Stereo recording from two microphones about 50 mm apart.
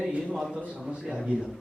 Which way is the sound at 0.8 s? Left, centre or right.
Centre.